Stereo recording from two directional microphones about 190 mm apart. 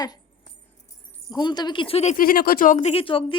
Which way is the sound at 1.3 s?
20° left (ahead or behind).